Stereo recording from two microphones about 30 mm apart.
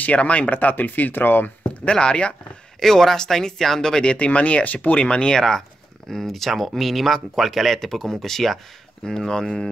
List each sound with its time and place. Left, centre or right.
0.0 s speech: left
1.9 s speech: left
2.8 s speech: centre
3.9 s speech: left
4.3 s speech: left
4.9 s speech: left
5.3 s speech: centre
7.8 s speech: centre